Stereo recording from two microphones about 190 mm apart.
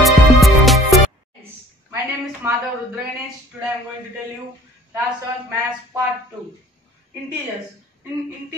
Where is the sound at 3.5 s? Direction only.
10° right (ahead or behind).